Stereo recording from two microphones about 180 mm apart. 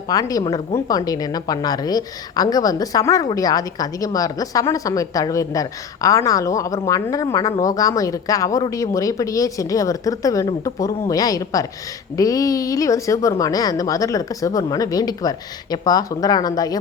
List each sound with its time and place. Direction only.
0.1 s a woman's voice: 20° left (ahead or behind)